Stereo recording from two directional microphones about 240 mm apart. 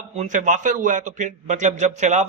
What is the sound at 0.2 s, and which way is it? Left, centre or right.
A man's voice, right.